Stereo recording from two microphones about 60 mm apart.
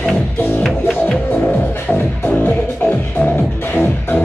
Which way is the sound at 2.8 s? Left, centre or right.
Left.